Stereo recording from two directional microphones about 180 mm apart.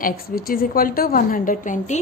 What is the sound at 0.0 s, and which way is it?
A woman's voice, 55° left (ahead or behind).